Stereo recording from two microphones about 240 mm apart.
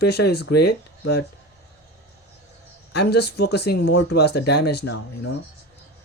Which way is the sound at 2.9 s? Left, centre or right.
Left.